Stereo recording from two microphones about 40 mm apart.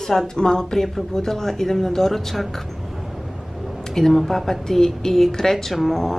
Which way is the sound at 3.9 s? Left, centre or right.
Centre.